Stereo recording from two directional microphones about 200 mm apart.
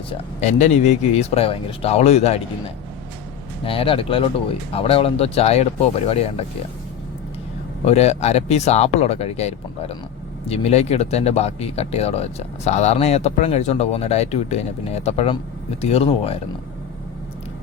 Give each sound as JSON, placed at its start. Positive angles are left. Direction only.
{"t": 0.1, "sound": "speech", "side_deg": 35}
{"t": 3.6, "sound": "speech", "side_deg": 25}
{"t": 7.9, "sound": "speech", "side_deg": 30}